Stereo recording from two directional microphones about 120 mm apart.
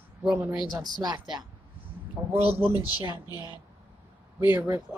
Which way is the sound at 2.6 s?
35° left (ahead or behind).